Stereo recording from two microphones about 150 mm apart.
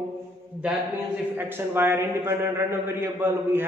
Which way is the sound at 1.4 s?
15° right (ahead or behind).